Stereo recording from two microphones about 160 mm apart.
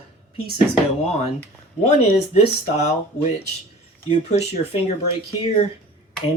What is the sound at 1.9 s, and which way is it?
Speech, 45° left (ahead or behind).